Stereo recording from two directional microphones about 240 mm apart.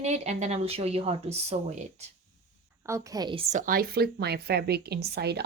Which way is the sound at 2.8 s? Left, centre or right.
Centre.